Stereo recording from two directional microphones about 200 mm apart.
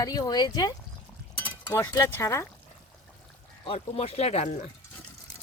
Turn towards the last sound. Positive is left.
turn(degrees=35)  # may be behind; listen again after turning